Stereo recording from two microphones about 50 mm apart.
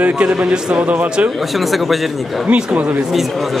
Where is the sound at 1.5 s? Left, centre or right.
Centre.